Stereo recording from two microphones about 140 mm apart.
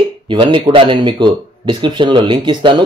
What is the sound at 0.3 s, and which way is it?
A man's voice, 35° right (ahead or behind).